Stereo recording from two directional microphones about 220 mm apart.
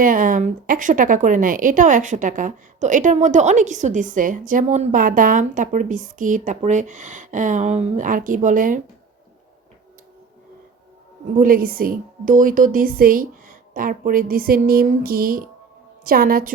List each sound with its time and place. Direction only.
0.0 s a woman's voice: 40° right (ahead or behind)
11.3 s a woman's voice: 40° right (ahead or behind)